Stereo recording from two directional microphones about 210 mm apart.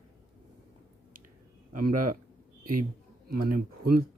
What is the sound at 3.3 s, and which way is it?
Speech, 45° right (ahead or behind).